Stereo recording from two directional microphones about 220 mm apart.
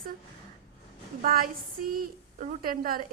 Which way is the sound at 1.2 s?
40° right (ahead or behind).